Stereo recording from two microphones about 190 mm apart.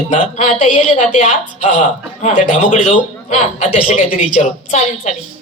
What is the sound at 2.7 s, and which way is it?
A man's voice, 40° left (ahead or behind).